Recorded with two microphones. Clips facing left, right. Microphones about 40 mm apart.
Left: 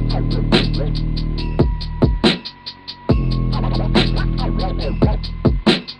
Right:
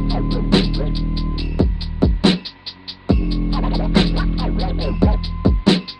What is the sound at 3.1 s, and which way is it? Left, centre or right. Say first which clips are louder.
Music: right 1 dB; left.